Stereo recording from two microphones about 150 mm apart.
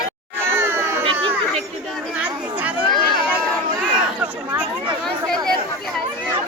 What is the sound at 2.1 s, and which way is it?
Chatter, 10° right (ahead or behind).